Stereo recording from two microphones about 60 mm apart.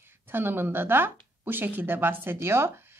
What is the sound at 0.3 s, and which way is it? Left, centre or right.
A woman's voice, right.